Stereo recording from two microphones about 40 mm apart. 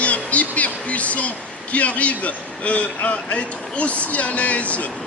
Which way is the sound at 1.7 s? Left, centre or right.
Left.